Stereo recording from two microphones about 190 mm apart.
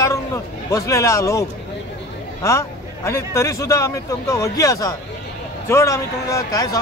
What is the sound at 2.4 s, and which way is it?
A man's voice, 15° left (ahead or behind).